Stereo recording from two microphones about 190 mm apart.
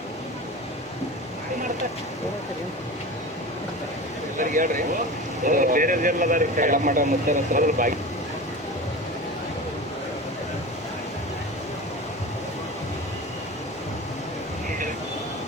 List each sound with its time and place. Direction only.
4.4 s speech: 45° right (ahead or behind)